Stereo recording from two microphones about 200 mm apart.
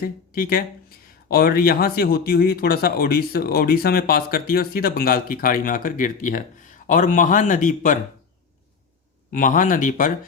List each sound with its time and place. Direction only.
0.0 s a man's voice: 45° left (ahead or behind)
9.3 s speech: 40° left (ahead or behind)